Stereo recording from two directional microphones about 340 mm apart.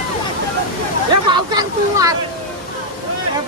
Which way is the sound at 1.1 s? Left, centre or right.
Centre.